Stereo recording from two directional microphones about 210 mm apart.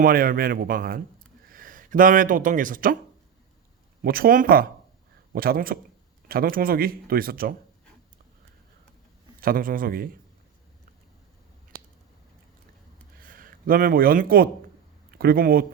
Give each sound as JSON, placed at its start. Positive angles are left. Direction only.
{"t": 0.0, "sound": "speech", "side_deg": -45}
{"t": 4.0, "sound": "speech", "side_deg": -45}
{"t": 9.4, "sound": "speech", "side_deg": -45}
{"t": 13.1, "sound": "speech", "side_deg": -40}